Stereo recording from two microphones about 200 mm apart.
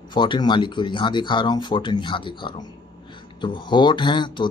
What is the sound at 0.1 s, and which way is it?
Speech, 25° left (ahead or behind).